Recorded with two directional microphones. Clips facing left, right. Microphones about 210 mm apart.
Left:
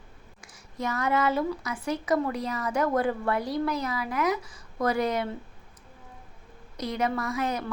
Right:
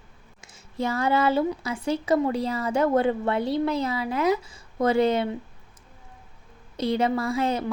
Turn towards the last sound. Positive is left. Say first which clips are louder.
# right 4 dB
turn(degrees=-25)  # may be behind; listen again after turning